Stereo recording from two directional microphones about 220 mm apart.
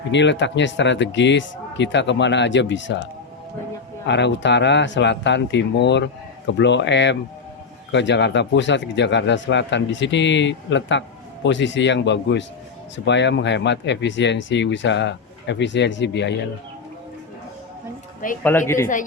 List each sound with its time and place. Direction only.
0.1 s speech: 55° left (ahead or behind)
4.0 s speech: 50° left (ahead or behind)
18.4 s speech: 10° left (ahead or behind)